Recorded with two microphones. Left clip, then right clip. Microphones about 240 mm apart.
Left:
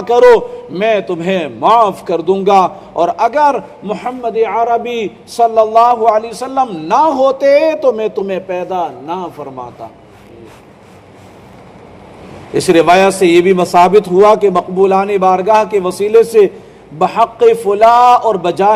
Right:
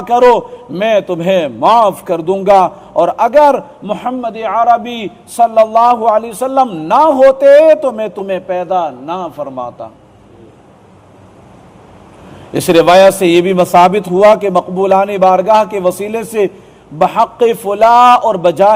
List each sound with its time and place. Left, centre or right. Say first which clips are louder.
0.7 s a man's voice: right 1 dB; right
12.5 s a man's voice: right 2 dB; right